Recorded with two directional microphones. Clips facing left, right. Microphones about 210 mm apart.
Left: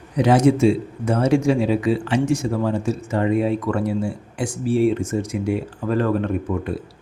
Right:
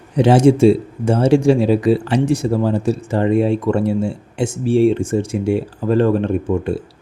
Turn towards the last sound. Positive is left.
turn(degrees=-30)  # may be behind; listen again after turning